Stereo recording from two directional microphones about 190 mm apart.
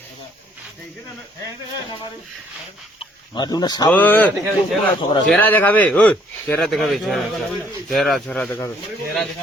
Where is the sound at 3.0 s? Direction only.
25° left (ahead or behind).